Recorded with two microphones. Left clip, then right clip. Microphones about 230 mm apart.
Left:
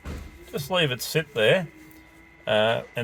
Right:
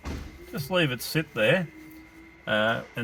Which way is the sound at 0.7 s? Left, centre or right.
Left.